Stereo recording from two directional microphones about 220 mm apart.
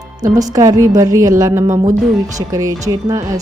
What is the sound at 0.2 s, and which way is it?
A woman's voice, 15° right (ahead or behind).